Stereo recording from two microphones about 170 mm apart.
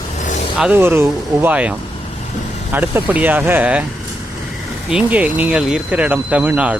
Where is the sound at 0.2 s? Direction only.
45° left (ahead or behind).